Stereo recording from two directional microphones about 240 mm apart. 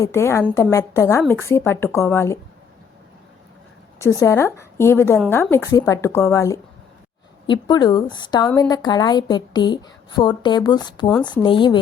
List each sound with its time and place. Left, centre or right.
0.0 s a woman's voice: centre
3.9 s a woman's voice: centre